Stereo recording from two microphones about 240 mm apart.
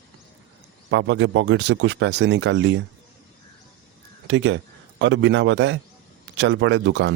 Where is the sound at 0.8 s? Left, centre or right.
Right.